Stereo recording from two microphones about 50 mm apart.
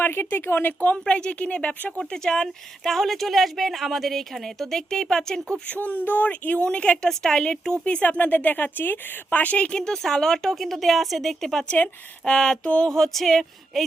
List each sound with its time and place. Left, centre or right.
0.0 s speech: left
0.9 s speech: centre
2.0 s speech: centre
5.6 s speech: left
8.2 s speech: left; by 11.6 s centre
12.2 s speech: centre
12.9 s speech: centre